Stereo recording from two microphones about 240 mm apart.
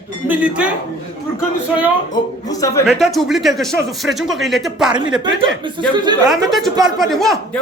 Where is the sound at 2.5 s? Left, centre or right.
Centre.